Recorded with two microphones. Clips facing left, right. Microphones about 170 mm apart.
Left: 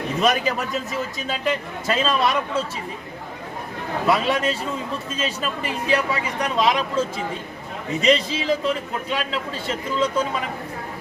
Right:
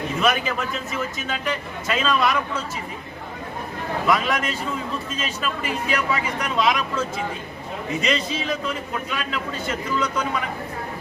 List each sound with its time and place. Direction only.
0.2 s a man's voice: 35° left (ahead or behind)
4.0 s a man's voice: 30° left (ahead or behind)
8.0 s a man's voice: 30° left (ahead or behind)